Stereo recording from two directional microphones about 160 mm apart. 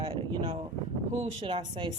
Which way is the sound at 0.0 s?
30° right (ahead or behind).